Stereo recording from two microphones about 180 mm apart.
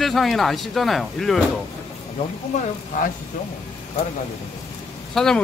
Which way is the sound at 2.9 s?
50° left (ahead or behind).